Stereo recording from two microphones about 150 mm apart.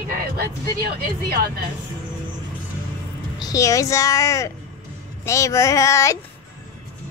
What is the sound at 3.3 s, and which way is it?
A child's voice, 25° left (ahead or behind).